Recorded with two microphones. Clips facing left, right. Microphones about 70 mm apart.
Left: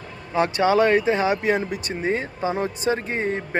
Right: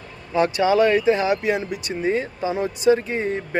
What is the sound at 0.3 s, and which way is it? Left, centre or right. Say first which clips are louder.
Speech: right 1 dB; left.